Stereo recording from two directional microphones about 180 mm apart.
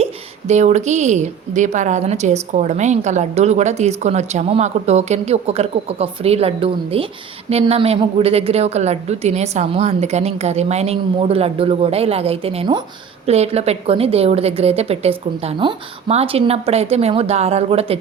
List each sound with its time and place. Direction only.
0.0 s a woman's voice: 40° right (ahead or behind)